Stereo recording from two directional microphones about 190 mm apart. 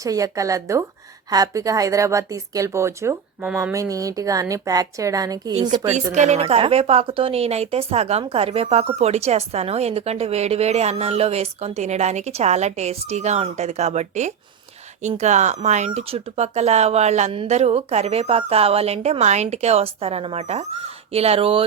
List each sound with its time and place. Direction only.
0.0 s a woman's voice: 15° right (ahead or behind)
5.9 s a woman's voice: 35° right (ahead or behind)